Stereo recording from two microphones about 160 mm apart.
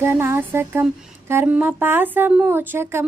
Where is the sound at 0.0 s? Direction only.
15° right (ahead or behind).